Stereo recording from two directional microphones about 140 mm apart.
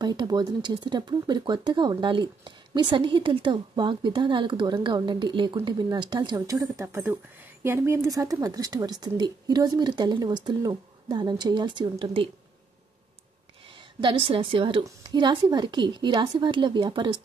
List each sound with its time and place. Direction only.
0.0 s a woman's voice: 30° right (ahead or behind)
13.7 s a woman's voice: 35° right (ahead or behind)